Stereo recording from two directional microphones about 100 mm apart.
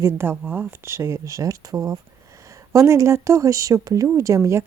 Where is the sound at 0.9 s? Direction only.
30° right (ahead or behind).